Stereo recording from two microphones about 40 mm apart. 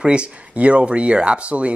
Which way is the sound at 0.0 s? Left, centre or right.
Right.